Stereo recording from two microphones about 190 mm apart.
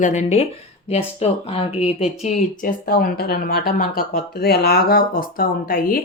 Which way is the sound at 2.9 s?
55° left (ahead or behind).